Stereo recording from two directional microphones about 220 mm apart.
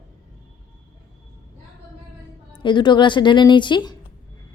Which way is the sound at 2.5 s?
20° left (ahead or behind).